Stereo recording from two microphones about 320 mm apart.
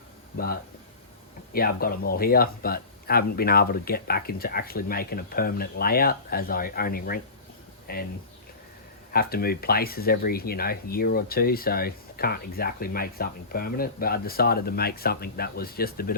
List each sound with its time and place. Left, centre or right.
0.3 s speech: left
9.1 s speech: left